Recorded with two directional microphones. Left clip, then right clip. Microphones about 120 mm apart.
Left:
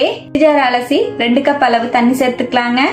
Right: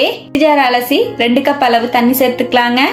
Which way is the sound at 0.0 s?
20° right (ahead or behind).